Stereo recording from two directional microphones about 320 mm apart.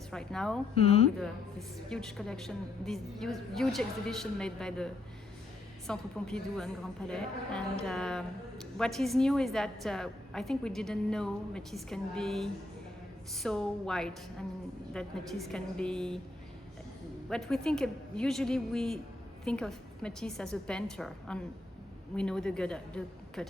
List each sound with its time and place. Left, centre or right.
0.1 s a woman's voice: centre
0.8 s speech: centre
1.9 s a woman's voice: centre
5.9 s a woman's voice: centre
17.2 s a woman's voice: centre